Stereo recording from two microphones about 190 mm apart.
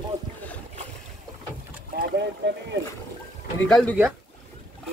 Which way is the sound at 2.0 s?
60° right (ahead or behind).